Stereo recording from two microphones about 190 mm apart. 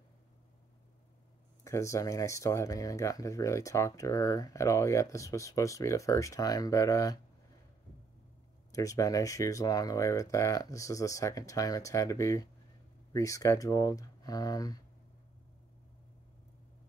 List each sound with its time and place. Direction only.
1.6 s speech: 15° left (ahead or behind)
8.7 s speech: 15° left (ahead or behind)